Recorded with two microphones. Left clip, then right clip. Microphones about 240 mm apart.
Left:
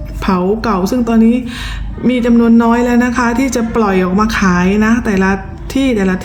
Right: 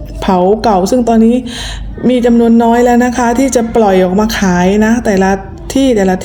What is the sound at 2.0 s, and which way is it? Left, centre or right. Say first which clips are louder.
A woman's voice: right 3 dB; centre.